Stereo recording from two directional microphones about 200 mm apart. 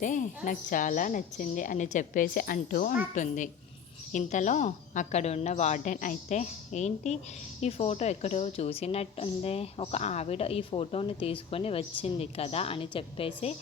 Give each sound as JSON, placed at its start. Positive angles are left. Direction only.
{"t": 0.0, "sound": "a woman's voice", "side_deg": 40}